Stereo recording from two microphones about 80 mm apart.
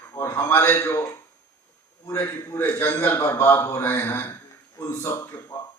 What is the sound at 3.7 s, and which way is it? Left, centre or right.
Speech, left.